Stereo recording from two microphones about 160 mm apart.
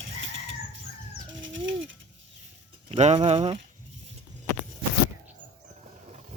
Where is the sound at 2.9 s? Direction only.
45° right (ahead or behind).